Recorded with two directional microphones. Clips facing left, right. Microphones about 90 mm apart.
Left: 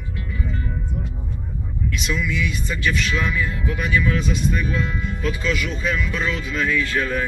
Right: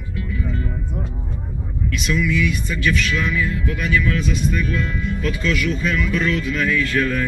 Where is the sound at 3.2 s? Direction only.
10° left (ahead or behind).